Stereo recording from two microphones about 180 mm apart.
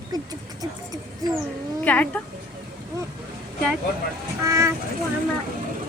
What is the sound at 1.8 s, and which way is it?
Speech, 10° left (ahead or behind).